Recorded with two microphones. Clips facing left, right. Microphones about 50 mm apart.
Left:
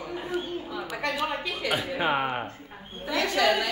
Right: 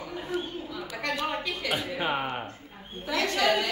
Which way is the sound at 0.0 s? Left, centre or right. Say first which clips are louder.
Left 1 dB; centre.